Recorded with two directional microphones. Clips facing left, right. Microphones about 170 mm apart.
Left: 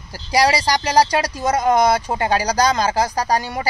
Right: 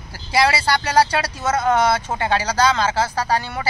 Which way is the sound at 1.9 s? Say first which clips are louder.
Left 2 dB; 35° left (ahead or behind).